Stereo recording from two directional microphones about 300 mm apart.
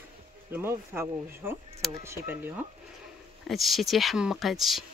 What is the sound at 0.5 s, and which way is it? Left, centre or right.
Speech, centre.